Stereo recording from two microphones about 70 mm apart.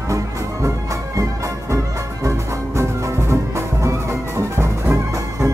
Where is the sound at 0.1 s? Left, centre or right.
Right.